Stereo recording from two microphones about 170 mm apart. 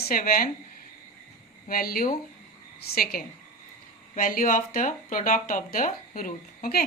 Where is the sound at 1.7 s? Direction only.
60° left (ahead or behind).